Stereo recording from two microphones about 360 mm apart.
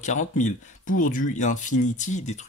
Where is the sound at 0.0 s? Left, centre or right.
Centre.